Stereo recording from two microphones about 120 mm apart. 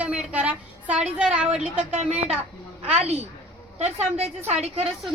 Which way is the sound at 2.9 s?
60° right (ahead or behind).